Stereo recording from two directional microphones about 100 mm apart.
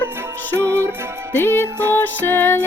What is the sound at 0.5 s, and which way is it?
Music, 25° right (ahead or behind).